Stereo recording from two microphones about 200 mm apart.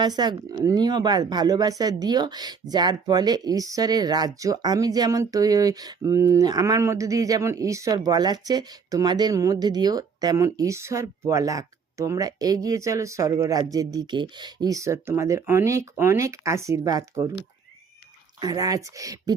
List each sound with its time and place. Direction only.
0.0 s speech: 20° right (ahead or behind)
18.3 s speech: 20° right (ahead or behind)